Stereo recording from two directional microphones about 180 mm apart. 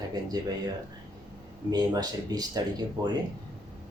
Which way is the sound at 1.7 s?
20° right (ahead or behind).